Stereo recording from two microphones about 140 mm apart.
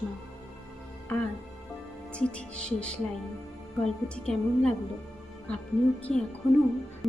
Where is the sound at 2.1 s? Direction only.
10° left (ahead or behind).